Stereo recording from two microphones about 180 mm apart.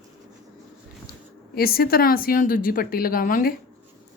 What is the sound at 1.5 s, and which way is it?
A woman's voice, 55° left (ahead or behind).